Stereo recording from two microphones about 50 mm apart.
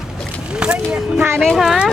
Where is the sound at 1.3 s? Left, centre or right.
Centre.